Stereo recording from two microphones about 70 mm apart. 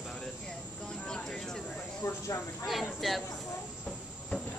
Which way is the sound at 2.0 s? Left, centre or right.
Left.